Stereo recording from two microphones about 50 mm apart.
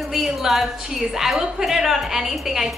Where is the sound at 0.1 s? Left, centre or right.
Centre.